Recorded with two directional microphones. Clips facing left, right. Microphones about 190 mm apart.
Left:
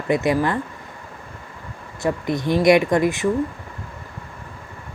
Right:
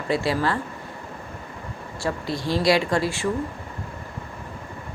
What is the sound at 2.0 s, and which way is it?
A woman's voice, 20° left (ahead or behind).